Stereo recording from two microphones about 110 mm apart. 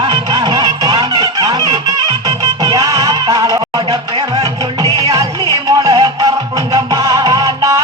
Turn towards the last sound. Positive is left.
turn(degrees=-35)  # may be behind; listen again after turning